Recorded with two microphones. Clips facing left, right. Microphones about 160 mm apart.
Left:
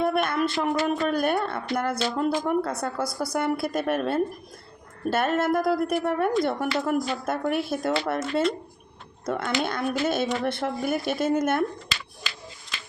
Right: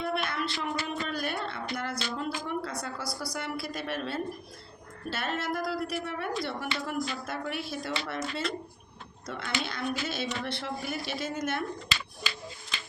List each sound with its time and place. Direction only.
0.0 s a sound: 50° left (ahead or behind)
0.9 s a woman's voice: 50° left (ahead or behind)
9.2 s a woman's voice: 50° left (ahead or behind)